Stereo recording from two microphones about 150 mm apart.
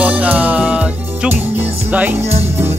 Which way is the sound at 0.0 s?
10° right (ahead or behind).